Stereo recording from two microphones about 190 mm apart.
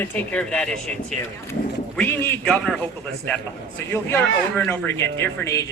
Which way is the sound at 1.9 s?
5° left (ahead or behind).